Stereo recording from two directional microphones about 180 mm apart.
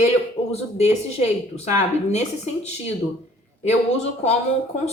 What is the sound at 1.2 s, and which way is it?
Speech, 35° left (ahead or behind).